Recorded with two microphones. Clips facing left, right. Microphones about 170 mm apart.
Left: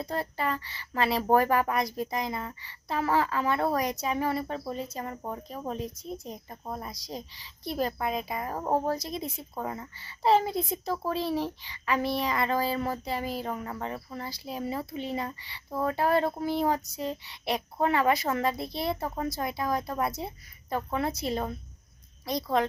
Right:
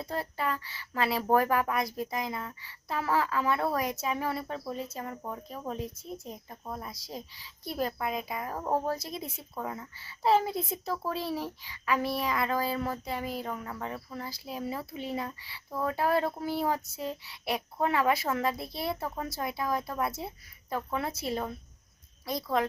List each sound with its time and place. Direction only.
0.0 s speech: 5° right (ahead or behind)
6.5 s a woman's voice: 15° left (ahead or behind)
6.8 s speech: 5° right (ahead or behind)
8.5 s speech: 20° left (ahead or behind)
8.9 s speech: 5° right (ahead or behind)
13.3 s speech: 30° left (ahead or behind)
13.8 s speech: 5° left (ahead or behind)